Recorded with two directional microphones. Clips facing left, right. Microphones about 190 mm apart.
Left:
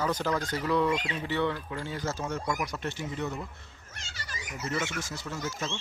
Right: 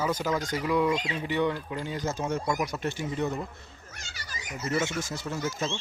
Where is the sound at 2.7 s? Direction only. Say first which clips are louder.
Right 3 dB; 10° right (ahead or behind).